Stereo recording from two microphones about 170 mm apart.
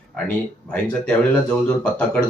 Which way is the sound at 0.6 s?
5° left (ahead or behind).